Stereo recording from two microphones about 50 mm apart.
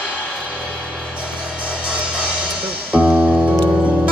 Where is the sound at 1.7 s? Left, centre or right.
Right.